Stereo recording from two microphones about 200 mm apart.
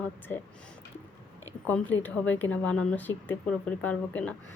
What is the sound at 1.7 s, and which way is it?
A woman's voice, 10° left (ahead or behind).